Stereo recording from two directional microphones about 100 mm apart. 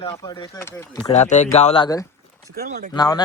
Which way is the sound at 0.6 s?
25° left (ahead or behind).